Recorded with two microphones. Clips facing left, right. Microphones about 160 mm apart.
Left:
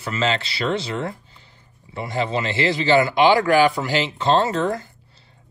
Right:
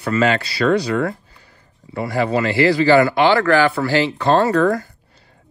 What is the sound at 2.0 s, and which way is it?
Speech, 25° left (ahead or behind).